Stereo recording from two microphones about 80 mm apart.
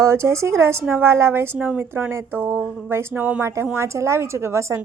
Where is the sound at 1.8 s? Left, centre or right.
Right.